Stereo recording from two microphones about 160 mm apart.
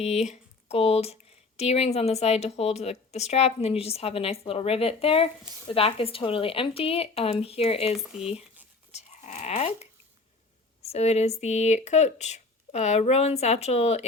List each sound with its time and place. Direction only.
0.0 s speech: 40° left (ahead or behind)
8.1 s speech: 5° right (ahead or behind)
8.9 s livestock: 45° left (ahead or behind)
10.8 s speech: 40° left (ahead or behind)